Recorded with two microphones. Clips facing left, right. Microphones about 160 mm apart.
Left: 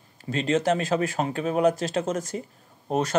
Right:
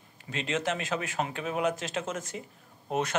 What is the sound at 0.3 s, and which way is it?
Speech, 40° left (ahead or behind).